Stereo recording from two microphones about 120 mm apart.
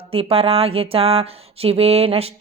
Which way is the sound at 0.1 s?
55° right (ahead or behind).